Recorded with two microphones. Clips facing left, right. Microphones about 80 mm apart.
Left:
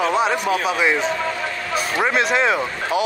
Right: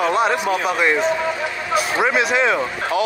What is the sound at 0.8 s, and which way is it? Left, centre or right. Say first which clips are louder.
A man's voice: right 2 dB; centre.